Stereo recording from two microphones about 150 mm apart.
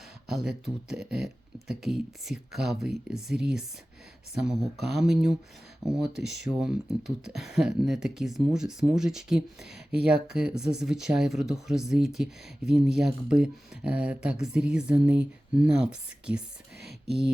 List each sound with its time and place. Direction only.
0.3 s speech: centre (ahead or behind)
4.4 s speech: 5° right (ahead or behind)